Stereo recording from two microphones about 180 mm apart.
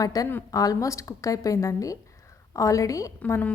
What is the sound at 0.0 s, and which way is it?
A woman's voice, 20° left (ahead or behind).